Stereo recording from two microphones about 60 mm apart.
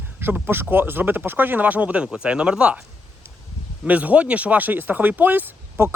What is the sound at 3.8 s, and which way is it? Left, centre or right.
Speech, right.